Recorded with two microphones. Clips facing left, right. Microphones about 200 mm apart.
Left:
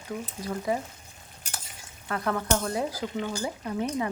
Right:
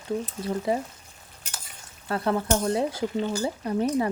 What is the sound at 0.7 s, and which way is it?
Speech, 30° right (ahead or behind).